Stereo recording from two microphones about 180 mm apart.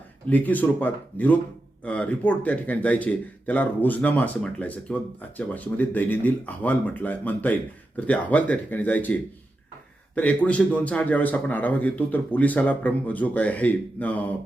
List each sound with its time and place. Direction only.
0.3 s a man's voice: 10° left (ahead or behind)
10.2 s a man's voice: 10° left (ahead or behind)